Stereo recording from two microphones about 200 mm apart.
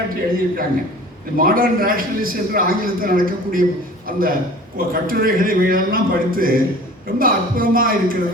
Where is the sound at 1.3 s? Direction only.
45° right (ahead or behind).